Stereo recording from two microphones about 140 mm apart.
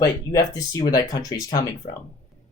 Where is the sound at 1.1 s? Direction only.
25° left (ahead or behind).